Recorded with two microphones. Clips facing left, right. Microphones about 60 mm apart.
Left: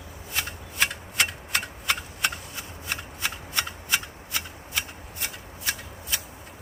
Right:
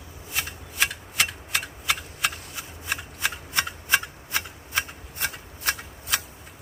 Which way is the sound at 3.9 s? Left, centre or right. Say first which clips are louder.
Right 5 dB; right.